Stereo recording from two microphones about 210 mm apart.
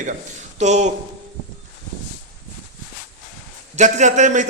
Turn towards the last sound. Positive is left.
turn(degrees=-35)  # may be behind; listen again after turning